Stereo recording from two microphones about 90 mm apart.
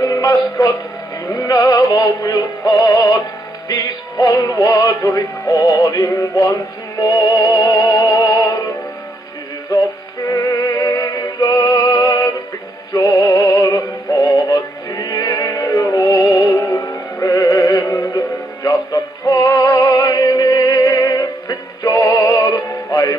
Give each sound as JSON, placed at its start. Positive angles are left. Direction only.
{"t": 0.0, "sound": "music", "side_deg": 40}
{"t": 1.3, "sound": "synthetic singing", "side_deg": 40}
{"t": 11.0, "sound": "music", "side_deg": 45}
{"t": 12.9, "sound": "synthetic singing", "side_deg": 40}